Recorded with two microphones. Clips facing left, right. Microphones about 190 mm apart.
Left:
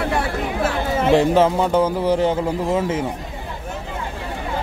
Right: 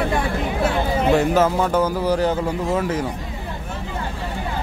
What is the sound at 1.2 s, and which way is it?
Speech, 30° left (ahead or behind).